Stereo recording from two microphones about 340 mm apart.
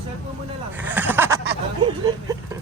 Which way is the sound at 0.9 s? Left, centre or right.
Centre.